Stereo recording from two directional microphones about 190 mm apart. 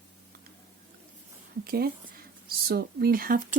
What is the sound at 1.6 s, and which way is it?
Speech, 55° right (ahead or behind).